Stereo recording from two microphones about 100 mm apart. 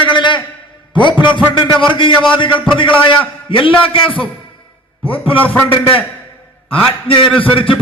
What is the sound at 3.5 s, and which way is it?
A man's voice, 60° left (ahead or behind).